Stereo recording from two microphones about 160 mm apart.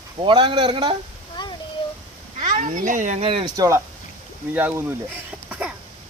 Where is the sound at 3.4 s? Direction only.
20° right (ahead or behind).